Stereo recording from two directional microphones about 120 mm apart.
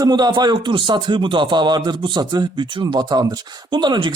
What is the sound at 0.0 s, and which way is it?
Speech, 35° right (ahead or behind).